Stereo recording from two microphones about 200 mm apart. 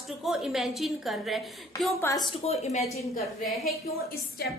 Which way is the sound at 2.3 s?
30° left (ahead or behind).